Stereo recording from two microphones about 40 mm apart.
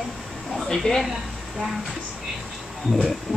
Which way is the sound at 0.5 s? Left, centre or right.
Centre.